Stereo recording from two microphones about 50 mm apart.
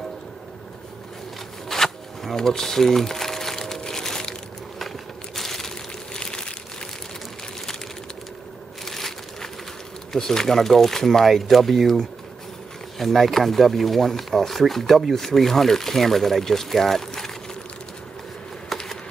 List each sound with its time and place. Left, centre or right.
1.7 s crumpling: centre
8.8 s crushing: centre
10.1 s speech: centre
18.7 s a sound: centre